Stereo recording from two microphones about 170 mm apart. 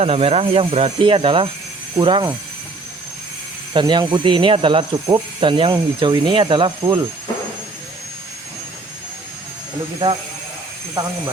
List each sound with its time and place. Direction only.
0.0 s speech: 35° right (ahead or behind)
3.8 s speech: 25° right (ahead or behind)
10.0 s speech: 25° right (ahead or behind)